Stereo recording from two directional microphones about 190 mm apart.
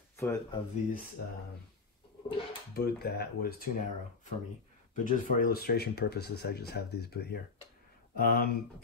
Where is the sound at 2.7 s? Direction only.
55° left (ahead or behind).